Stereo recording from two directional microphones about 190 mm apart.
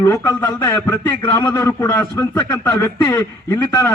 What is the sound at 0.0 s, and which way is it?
A man's voice, 15° left (ahead or behind).